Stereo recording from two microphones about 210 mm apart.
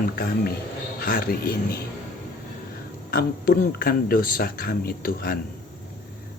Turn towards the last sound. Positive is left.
turn(degrees=45)  # may be behind; listen again after turning